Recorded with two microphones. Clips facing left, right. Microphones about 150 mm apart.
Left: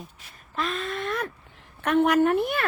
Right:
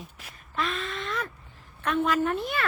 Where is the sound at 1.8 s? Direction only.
70° left (ahead or behind).